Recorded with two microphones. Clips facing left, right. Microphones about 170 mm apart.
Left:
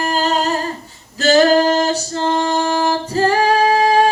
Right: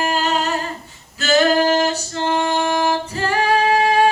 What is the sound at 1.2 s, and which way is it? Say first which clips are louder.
Female singing: left 4 dB; 40° left (ahead or behind).